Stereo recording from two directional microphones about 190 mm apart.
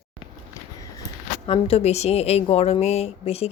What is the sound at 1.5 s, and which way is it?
A woman's voice, 30° left (ahead or behind).